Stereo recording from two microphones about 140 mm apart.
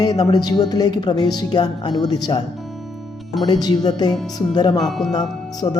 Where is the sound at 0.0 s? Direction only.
30° left (ahead or behind).